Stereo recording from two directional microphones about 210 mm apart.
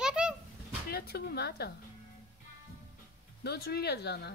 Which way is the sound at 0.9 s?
50° left (ahead or behind).